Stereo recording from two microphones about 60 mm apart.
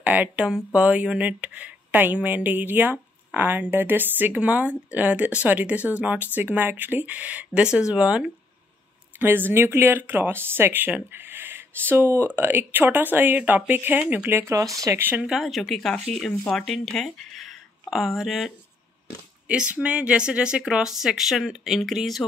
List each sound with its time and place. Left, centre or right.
0.0 s speech: right
0.7 s speech: centre
7.6 s speech: centre
9.2 s speech: right
14.5 s speech: right
15.0 s speech: right
15.3 s speech: centre
19.4 s speech: centre